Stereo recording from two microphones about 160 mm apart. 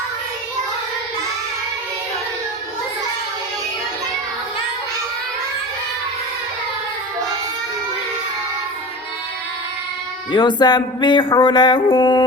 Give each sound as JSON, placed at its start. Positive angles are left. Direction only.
{"t": 10.3, "sound": "speech", "side_deg": 25}
{"t": 11.9, "sound": "dog", "side_deg": 30}